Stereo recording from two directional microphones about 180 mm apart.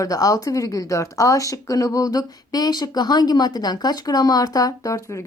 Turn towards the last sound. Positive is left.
turn(degrees=20)  # may be behind; listen again after turning